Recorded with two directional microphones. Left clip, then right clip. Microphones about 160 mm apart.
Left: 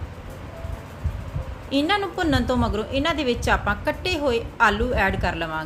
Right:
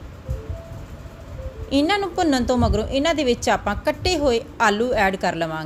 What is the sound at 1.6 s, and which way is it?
A woman's voice, 45° right (ahead or behind).